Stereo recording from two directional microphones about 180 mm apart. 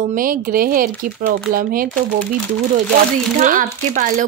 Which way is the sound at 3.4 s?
45° right (ahead or behind).